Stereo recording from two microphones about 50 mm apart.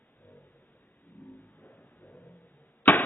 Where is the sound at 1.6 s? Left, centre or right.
Left.